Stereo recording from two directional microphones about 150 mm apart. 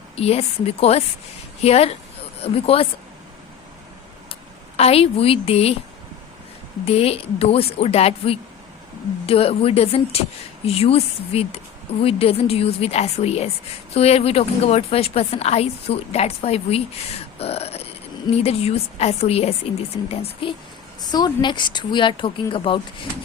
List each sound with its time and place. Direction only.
0.2 s a woman's voice: 45° left (ahead or behind)
4.8 s a woman's voice: 40° left (ahead or behind)
6.8 s a woman's voice: 40° left (ahead or behind)